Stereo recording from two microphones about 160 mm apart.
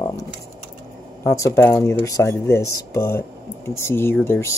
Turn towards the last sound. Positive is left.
turn(degrees=15)  # may be behind; listen again after turning